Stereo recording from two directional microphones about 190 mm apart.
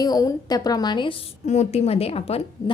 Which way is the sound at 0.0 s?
20° left (ahead or behind).